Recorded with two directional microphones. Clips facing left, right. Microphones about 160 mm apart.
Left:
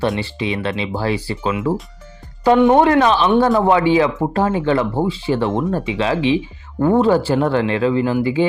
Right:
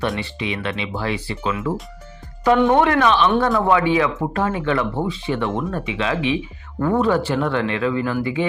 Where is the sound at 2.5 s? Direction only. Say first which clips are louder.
Left 4 dB; 10° left (ahead or behind).